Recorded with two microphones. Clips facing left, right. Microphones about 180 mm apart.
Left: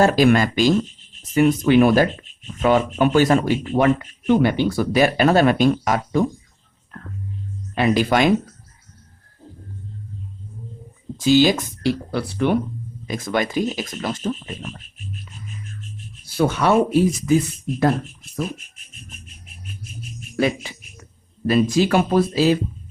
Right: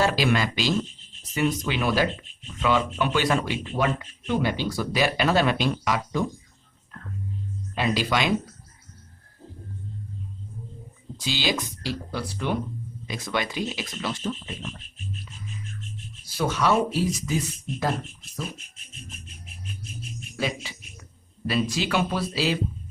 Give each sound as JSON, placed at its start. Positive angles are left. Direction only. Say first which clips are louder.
{"t": 0.0, "sound": "speech", "louder": "left 8 dB", "side_deg": 50}
{"t": 4.3, "sound": "speech", "louder": "left 8 dB", "side_deg": 55}
{"t": 7.8, "sound": "speech", "louder": "left 7 dB", "side_deg": 50}
{"t": 11.2, "sound": "speech", "louder": "left 12 dB", "side_deg": 45}
{"t": 13.1, "sound": "speech", "louder": "left 6 dB", "side_deg": 45}
{"t": 16.2, "sound": "speech", "louder": "left 5 dB", "side_deg": 55}
{"t": 20.3, "sound": "speech", "louder": "left 9 dB", "side_deg": 55}